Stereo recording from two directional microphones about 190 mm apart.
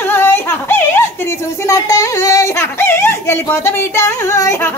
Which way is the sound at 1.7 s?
15° left (ahead or behind).